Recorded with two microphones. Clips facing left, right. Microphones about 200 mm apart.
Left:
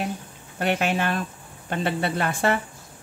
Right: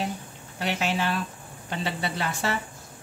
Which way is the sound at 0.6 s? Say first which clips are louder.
Left 4 dB; 55° left (ahead or behind).